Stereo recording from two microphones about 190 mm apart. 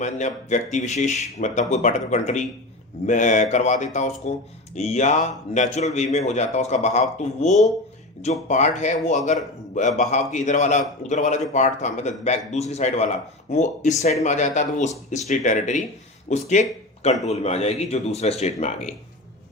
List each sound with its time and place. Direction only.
0.0 s speech: 40° left (ahead or behind)